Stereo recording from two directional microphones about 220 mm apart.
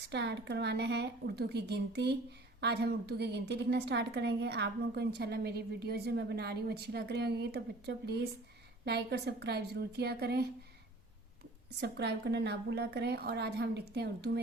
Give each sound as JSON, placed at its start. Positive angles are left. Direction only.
{"t": 0.1, "sound": "a woman's voice", "side_deg": -50}
{"t": 11.8, "sound": "a woman's voice", "side_deg": -50}